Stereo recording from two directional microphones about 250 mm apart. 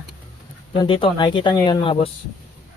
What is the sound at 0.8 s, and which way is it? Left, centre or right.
Speech, centre.